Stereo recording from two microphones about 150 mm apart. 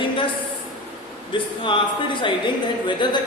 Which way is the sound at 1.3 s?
35° left (ahead or behind).